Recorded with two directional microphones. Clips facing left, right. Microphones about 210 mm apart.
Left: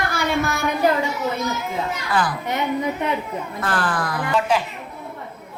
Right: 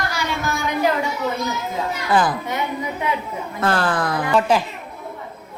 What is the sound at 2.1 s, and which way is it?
Speech, 20° right (ahead or behind).